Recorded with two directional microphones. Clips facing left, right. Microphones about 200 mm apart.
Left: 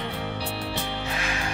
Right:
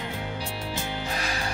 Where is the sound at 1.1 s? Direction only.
35° right (ahead or behind).